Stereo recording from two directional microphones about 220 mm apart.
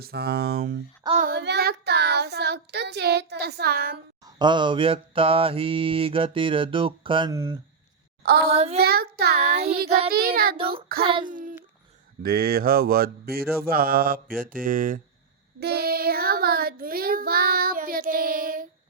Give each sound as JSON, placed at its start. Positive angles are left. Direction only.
{"t": 0.0, "sound": "child singing", "side_deg": -45}
{"t": 4.3, "sound": "mantra", "side_deg": -20}
{"t": 8.2, "sound": "child singing", "side_deg": -45}
{"t": 8.5, "sound": "mantra", "side_deg": -30}
{"t": 8.8, "sound": "child singing", "side_deg": -45}
{"t": 11.0, "sound": "mantra", "side_deg": -25}
{"t": 11.3, "sound": "a child's voice", "side_deg": -35}
{"t": 15.6, "sound": "child singing", "side_deg": -45}